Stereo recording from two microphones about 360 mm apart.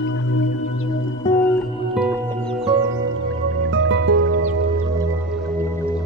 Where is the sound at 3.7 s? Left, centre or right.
Right.